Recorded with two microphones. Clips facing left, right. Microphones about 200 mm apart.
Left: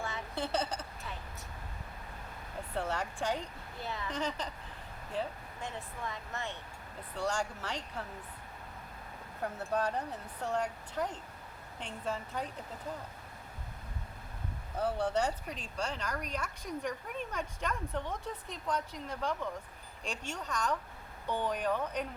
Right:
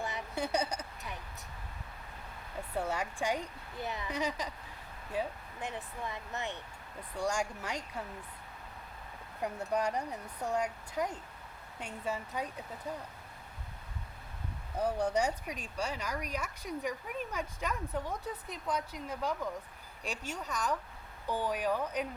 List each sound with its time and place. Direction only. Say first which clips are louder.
0.0 s a sound: right 1 dB; 15° right (ahead or behind)
2.7 s speech: right 1 dB; 10° right (ahead or behind)
9.4 s speech: right 1 dB; 10° right (ahead or behind)
14.8 s speech: right 1 dB; 15° right (ahead or behind)